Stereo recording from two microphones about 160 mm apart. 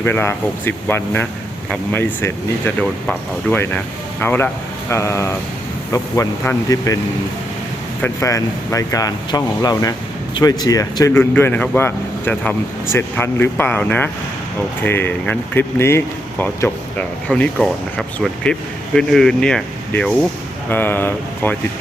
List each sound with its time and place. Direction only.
0.0 s speech: 15° left (ahead or behind)
8.0 s speech: 20° left (ahead or behind)